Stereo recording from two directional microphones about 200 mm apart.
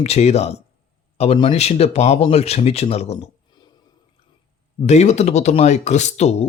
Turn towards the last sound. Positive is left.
turn(degrees=35)  # may be behind; listen again after turning